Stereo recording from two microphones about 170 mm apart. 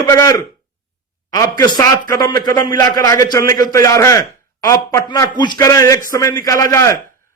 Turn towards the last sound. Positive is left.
turn(degrees=15)  # may be behind; listen again after turning